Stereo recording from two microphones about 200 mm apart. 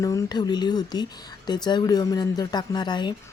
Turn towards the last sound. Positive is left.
turn(degrees=20)  # may be behind; listen again after turning